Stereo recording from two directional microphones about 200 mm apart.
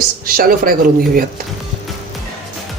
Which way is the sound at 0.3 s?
45° right (ahead or behind).